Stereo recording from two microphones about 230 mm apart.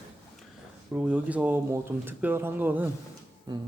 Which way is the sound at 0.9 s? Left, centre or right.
Centre.